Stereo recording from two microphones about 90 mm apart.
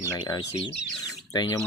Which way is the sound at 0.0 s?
35° left (ahead or behind).